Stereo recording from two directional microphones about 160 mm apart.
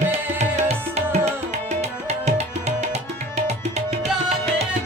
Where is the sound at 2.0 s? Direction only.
45° right (ahead or behind).